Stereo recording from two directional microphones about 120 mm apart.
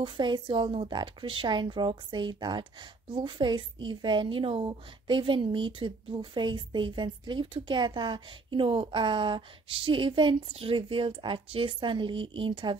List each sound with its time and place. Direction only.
0.0 s a woman's voice: 40° right (ahead or behind)